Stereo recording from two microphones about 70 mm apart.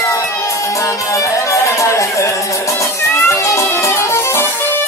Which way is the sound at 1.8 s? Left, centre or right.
Left.